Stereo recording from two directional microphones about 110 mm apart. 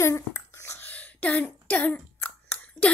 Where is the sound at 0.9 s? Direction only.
15° left (ahead or behind).